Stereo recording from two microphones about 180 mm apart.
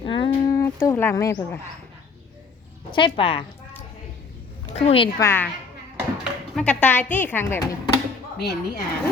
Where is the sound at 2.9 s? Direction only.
30° left (ahead or behind).